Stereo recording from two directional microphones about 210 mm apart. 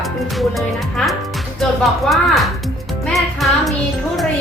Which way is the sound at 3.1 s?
Centre (ahead or behind).